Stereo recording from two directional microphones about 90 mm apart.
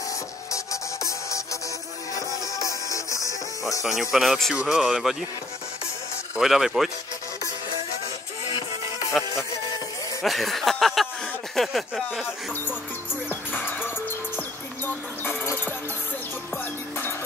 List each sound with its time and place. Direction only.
0.5 s music: 35° left (ahead or behind)
3.8 s speech: 5° right (ahead or behind)
6.3 s speech: 5° right (ahead or behind)
10.2 s speech: centre (ahead or behind)
12.6 s music: 20° left (ahead or behind)